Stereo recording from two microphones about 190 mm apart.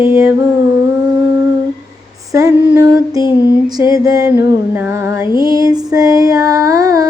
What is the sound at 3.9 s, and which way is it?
Music, 15° right (ahead or behind).